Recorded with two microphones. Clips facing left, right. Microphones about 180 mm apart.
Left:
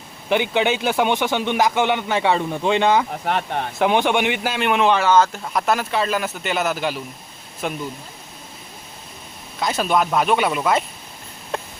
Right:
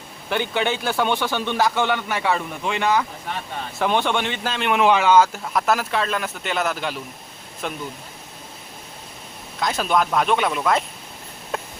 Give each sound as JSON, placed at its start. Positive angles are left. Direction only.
{"t": 0.3, "sound": "speech", "side_deg": 15}
{"t": 3.2, "sound": "speech", "side_deg": 65}
{"t": 3.8, "sound": "speech", "side_deg": 15}
{"t": 4.7, "sound": "speech", "side_deg": -10}
{"t": 9.6, "sound": "speech", "side_deg": 0}
{"t": 11.5, "sound": "a sound", "side_deg": 0}